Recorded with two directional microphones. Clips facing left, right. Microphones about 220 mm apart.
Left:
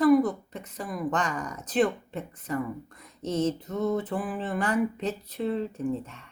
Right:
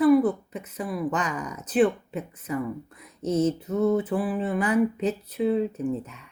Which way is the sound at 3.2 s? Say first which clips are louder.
Right 4 dB; 35° right (ahead or behind).